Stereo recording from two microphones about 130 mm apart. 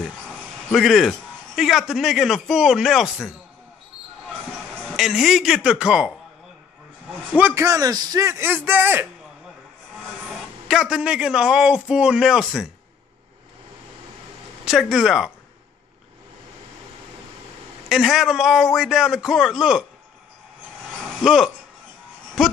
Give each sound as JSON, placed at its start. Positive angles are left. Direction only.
{"t": 0.7, "sound": "a man's voice", "side_deg": 0}
{"t": 4.9, "sound": "a man's voice", "side_deg": -5}
{"t": 7.3, "sound": "speech", "side_deg": -15}
{"t": 10.7, "sound": "a man's voice", "side_deg": -5}
{"t": 14.6, "sound": "speech", "side_deg": -5}
{"t": 17.8, "sound": "a man's voice", "side_deg": -5}
{"t": 21.2, "sound": "speech", "side_deg": 0}